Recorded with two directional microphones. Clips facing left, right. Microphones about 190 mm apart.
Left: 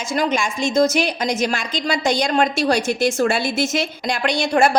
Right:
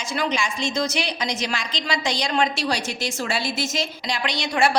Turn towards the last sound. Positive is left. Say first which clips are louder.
# left 5 dB
turn(degrees=45)  # may be behind; listen again after turning